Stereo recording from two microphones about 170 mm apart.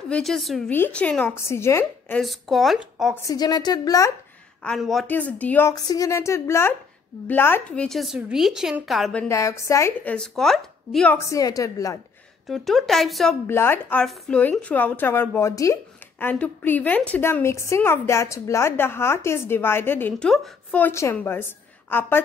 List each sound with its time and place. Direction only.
0.1 s speech: centre (ahead or behind)
2.2 s a woman's voice: centre (ahead or behind)
3.2 s a woman's voice: 20° left (ahead or behind)
4.6 s a woman's voice: centre (ahead or behind)
9.3 s speech: 15° left (ahead or behind)
10.1 s speech: 5° left (ahead or behind); by 12.0 s 20° left (ahead or behind)
12.4 s a woman's voice: centre (ahead or behind)
13.5 s speech: 15° left (ahead or behind)